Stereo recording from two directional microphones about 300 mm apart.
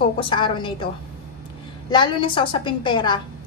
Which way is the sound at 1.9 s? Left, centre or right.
Centre.